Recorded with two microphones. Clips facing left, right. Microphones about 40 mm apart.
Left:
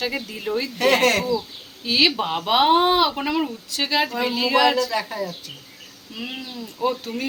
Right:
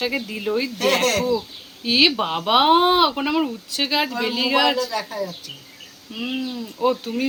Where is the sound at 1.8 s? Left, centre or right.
Centre.